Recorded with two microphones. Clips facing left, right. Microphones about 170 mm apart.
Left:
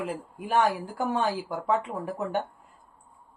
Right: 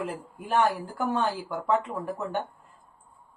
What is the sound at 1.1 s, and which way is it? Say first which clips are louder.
Speech: even; 15° left (ahead or behind).